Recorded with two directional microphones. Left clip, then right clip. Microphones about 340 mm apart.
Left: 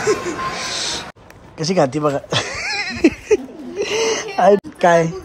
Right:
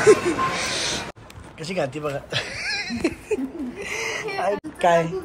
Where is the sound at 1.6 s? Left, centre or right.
Centre.